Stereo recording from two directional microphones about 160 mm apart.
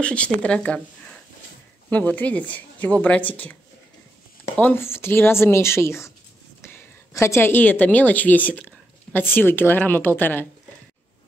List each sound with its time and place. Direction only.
0.0 s speech: 5° left (ahead or behind)
4.6 s speech: 15° left (ahead or behind)
6.6 s a sound: 15° left (ahead or behind)
7.8 s speech: 10° left (ahead or behind)